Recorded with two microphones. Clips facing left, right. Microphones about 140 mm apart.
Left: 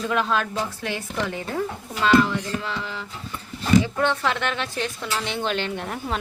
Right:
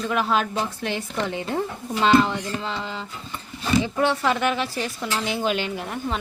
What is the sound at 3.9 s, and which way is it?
A woman's voice, 10° right (ahead or behind).